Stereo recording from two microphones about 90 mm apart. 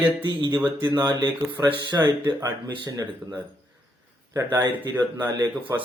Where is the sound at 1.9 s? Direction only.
35° right (ahead or behind).